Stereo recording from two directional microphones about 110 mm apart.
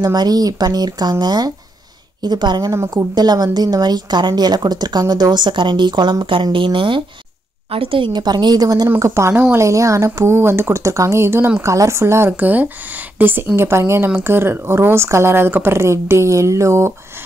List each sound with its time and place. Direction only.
0.0 s a woman's voice: 40° right (ahead or behind)
2.7 s a woman's voice: 30° right (ahead or behind)
9.0 s speech: 25° right (ahead or behind)